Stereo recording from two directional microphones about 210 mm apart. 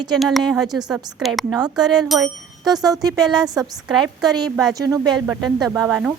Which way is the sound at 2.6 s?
20° right (ahead or behind).